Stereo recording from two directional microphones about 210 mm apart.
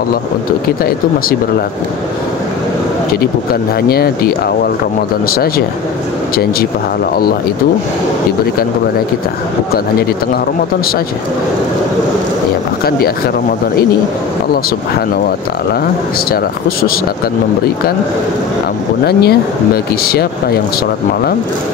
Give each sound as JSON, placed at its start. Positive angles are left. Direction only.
{"t": 3.9, "sound": "speech", "side_deg": 45}
{"t": 6.3, "sound": "speech", "side_deg": 45}
{"t": 16.3, "sound": "speech", "side_deg": 45}
{"t": 19.0, "sound": "speech", "side_deg": 45}